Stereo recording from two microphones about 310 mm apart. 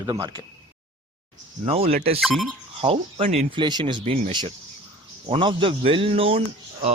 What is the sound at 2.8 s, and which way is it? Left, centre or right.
Speech, centre.